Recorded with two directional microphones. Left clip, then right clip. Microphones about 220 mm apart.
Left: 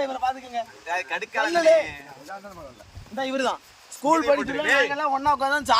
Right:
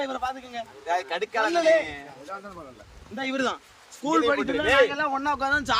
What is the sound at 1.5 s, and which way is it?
Speech, 10° left (ahead or behind).